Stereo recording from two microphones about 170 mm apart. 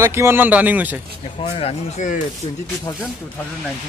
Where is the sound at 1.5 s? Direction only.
35° left (ahead or behind).